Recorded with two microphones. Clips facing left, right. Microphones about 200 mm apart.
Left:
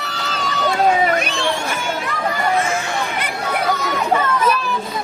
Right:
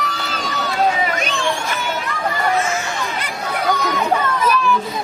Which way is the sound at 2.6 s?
55° left (ahead or behind).